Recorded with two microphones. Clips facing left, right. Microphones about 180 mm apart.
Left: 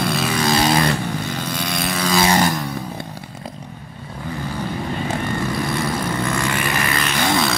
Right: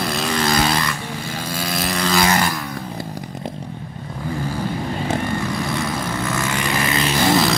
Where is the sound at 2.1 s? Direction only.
20° left (ahead or behind).